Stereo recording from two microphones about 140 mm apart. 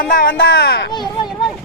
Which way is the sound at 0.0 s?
85° left.